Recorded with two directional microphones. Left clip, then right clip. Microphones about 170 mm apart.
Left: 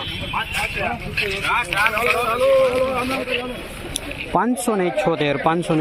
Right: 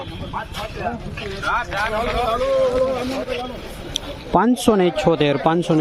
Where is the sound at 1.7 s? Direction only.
20° right (ahead or behind).